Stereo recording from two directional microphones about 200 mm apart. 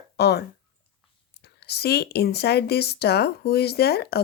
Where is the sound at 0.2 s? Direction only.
55° left (ahead or behind).